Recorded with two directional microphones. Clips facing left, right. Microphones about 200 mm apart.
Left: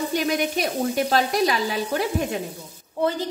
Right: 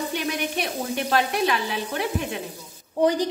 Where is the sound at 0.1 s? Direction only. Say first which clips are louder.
Left 4 dB; 40° left (ahead or behind).